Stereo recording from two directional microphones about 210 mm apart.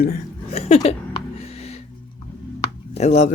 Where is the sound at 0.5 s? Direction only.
30° left (ahead or behind).